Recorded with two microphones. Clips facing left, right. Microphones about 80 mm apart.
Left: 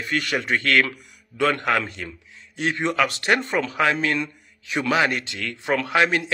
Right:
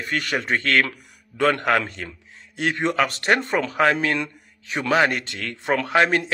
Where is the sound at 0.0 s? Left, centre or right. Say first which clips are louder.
Even; right.